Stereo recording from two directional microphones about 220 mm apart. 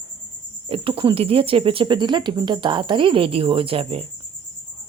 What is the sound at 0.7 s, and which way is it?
Speech, 25° right (ahead or behind).